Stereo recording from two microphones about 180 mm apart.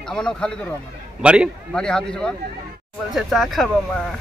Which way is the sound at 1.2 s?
5° right (ahead or behind).